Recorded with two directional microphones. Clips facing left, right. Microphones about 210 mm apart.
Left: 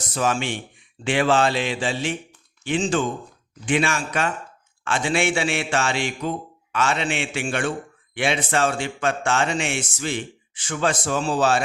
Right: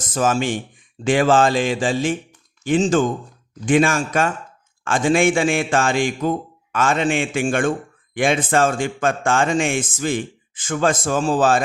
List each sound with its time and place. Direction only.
0.1 s a man's voice: 45° right (ahead or behind)